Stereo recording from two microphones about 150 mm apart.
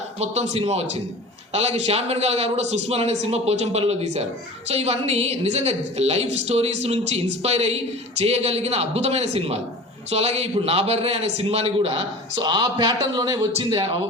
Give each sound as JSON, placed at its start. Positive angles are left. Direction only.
{"t": 0.2, "sound": "a woman's voice", "side_deg": -45}
{"t": 12.4, "sound": "speech", "side_deg": -25}